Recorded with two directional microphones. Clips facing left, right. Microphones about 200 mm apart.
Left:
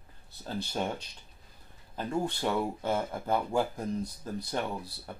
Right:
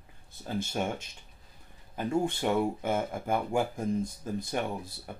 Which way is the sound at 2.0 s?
15° right (ahead or behind).